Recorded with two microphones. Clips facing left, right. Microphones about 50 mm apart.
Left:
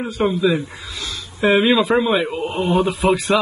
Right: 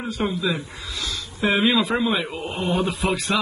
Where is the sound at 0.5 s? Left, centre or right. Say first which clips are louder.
Left 6 dB; left.